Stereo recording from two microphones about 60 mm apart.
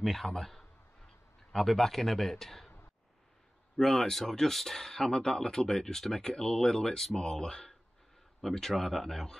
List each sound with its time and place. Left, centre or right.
0.0 s a man's voice: centre
3.7 s a man's voice: centre